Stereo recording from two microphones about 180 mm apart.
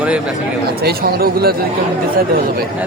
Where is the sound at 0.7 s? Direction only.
60° right (ahead or behind).